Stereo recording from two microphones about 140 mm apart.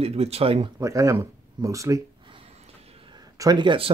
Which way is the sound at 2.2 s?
40° right (ahead or behind).